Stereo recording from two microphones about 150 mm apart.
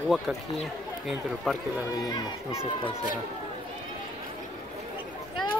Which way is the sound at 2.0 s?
30° left (ahead or behind).